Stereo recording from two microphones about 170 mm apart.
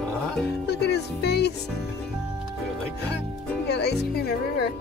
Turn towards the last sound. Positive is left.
turn(degrees=70)  # may be behind; listen again after turning